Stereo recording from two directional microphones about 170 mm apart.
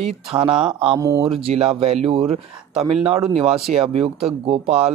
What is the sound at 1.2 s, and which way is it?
Speech, 35° right (ahead or behind).